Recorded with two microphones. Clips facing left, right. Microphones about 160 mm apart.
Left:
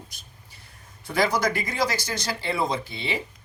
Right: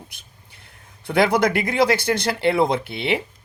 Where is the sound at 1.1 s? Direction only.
60° right (ahead or behind).